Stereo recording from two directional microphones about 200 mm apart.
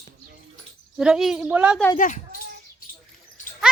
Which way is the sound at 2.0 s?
40° left (ahead or behind).